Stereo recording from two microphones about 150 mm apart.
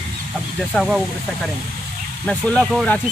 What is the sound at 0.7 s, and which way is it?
Speech, centre (ahead or behind).